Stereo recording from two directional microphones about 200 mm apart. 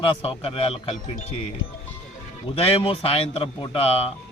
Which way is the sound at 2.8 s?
30° left (ahead or behind).